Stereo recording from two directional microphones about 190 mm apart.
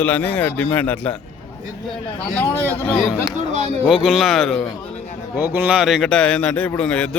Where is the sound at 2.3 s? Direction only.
10° left (ahead or behind).